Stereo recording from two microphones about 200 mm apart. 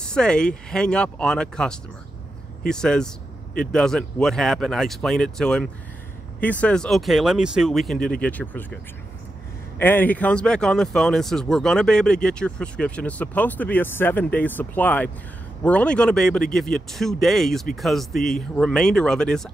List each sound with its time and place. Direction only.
0.0 s speech: 5° left (ahead or behind)
9.8 s speech: 10° left (ahead or behind)